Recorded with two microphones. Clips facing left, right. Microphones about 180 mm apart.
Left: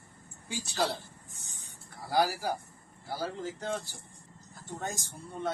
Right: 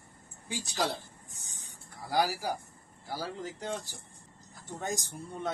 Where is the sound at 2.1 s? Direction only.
15° right (ahead or behind).